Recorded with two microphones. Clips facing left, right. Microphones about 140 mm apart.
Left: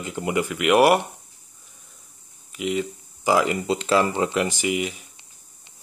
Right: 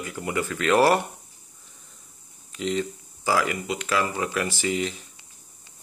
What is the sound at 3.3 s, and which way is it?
Speech, 25° left (ahead or behind).